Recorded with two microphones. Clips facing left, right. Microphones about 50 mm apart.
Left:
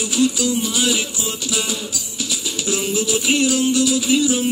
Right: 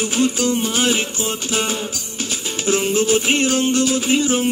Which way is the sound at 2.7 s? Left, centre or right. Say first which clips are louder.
Right 5 dB; right.